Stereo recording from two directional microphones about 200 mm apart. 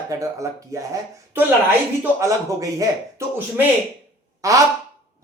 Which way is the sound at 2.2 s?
15° right (ahead or behind).